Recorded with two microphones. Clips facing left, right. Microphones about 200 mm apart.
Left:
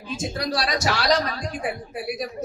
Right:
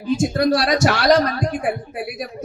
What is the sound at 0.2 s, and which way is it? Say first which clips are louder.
A man's voice: right 7 dB; 55° right (ahead or behind).